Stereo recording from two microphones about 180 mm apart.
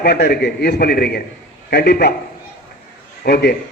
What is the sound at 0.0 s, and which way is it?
A man's voice, 60° left (ahead or behind).